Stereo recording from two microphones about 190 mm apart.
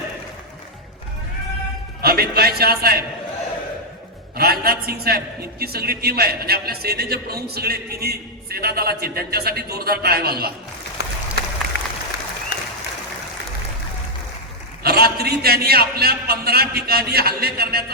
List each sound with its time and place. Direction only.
2.0 s a man's voice: 55° right (ahead or behind)
4.4 s a man's voice: 55° right (ahead or behind)
11.0 s a sound: 60° left (ahead or behind)
11.7 s applause: 65° left (ahead or behind)
14.8 s a man's voice: 55° right (ahead or behind)